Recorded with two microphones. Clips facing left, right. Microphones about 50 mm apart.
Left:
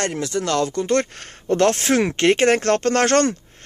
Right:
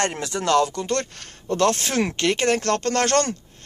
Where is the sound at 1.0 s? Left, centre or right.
Left.